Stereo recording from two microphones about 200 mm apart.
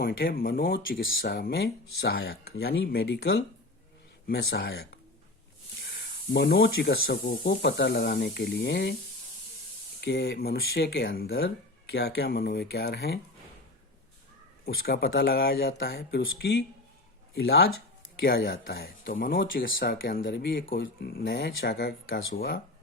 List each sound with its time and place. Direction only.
0.0 s speech: 45° left (ahead or behind)
10.0 s speech: 55° left (ahead or behind)
14.6 s speech: 50° left (ahead or behind)
20.2 s speech: 60° left (ahead or behind)